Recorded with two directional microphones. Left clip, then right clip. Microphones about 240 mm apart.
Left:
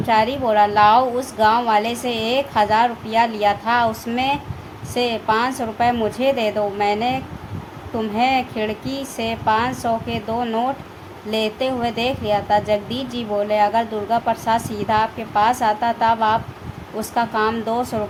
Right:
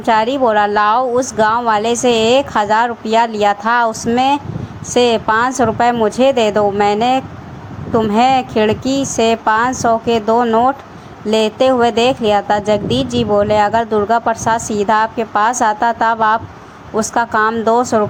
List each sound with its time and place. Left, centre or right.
0.0 s a woman's voice: right